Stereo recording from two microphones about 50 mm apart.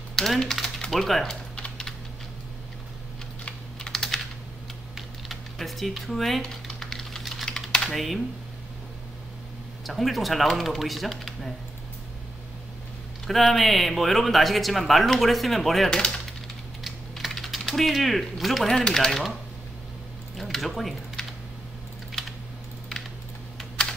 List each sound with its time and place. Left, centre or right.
0.1 s speech: centre
1.6 s typing: centre
3.8 s typing: centre
7.9 s speech: centre
9.8 s speech: centre
13.3 s speech: centre
15.9 s speech: centre
17.2 s speech: centre
18.8 s speech: centre
20.3 s a sound: centre